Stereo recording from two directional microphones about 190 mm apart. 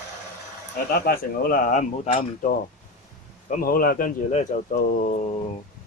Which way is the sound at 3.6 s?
50° left (ahead or behind).